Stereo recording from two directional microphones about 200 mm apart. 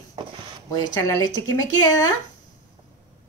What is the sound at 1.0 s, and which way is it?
Speech, 15° left (ahead or behind).